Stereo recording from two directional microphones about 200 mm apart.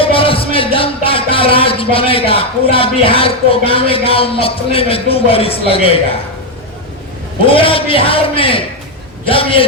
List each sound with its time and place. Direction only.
0.0 s music: 25° left (ahead or behind)
7.4 s a man's voice: 25° left (ahead or behind)